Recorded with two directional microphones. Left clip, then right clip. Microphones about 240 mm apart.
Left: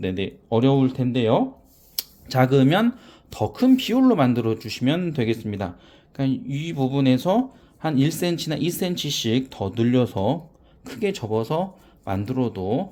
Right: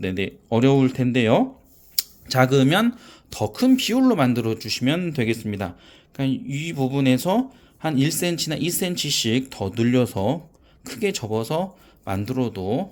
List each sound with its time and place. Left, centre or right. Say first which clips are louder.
0.0 s speech: right 1 dB; centre
2.0 s speech: right 2 dB; centre